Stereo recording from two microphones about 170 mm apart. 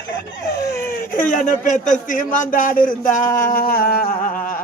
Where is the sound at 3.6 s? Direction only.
60° left (ahead or behind).